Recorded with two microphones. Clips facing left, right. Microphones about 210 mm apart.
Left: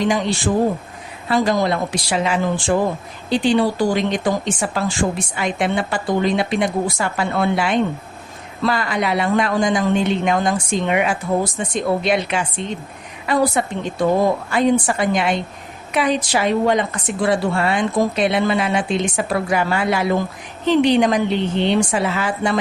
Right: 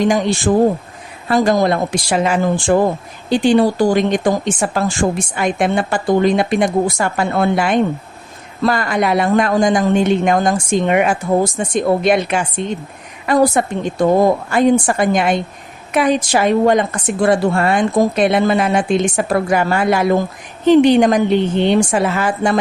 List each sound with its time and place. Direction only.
0.0 s speech: 50° right (ahead or behind)